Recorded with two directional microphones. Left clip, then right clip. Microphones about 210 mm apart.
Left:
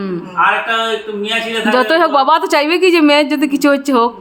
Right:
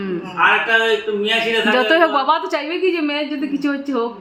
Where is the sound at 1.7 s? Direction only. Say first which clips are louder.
Left 5 dB; 20° left (ahead or behind); by 4.0 s 45° left (ahead or behind).